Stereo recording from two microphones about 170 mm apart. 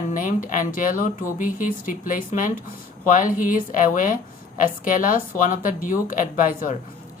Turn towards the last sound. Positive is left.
turn(degrees=50)  # may be behind; listen again after turning